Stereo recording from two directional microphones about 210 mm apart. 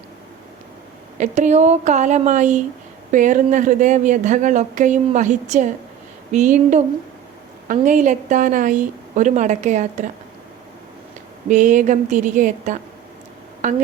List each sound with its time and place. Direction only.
1.2 s speech: 35° right (ahead or behind)
11.4 s speech: 35° right (ahead or behind)